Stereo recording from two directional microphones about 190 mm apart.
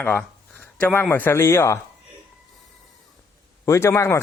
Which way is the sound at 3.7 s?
15° left (ahead or behind).